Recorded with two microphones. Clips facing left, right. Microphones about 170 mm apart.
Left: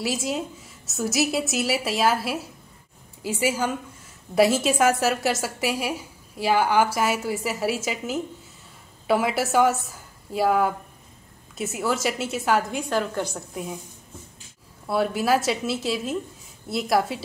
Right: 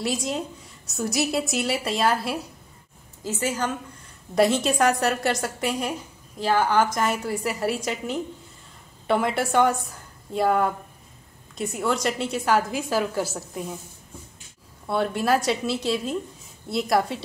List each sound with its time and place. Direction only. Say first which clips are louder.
0.0 s a woman's voice: even; 5° left (ahead or behind)
14.9 s a woman's voice: left 1 dB; 5° left (ahead or behind)